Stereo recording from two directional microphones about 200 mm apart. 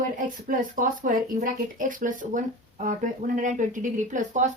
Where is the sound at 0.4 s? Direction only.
45° right (ahead or behind).